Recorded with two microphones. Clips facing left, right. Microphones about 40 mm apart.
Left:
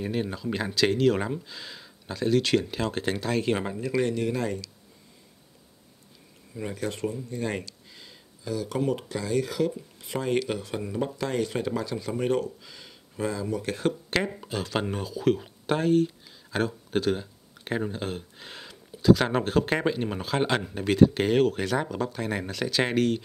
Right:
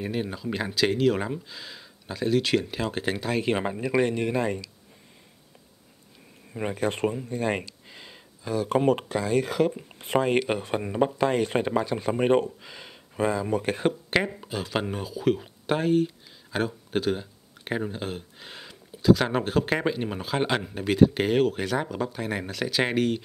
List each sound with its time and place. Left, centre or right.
0.0 s speech: centre; by 4.6 s right
6.5 s speech: right
7.2 s speech: right
14.3 s speech: centre